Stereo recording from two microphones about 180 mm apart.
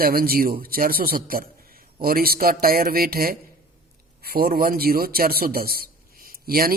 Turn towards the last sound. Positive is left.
turn(degrees=-55)  # may be behind; listen again after turning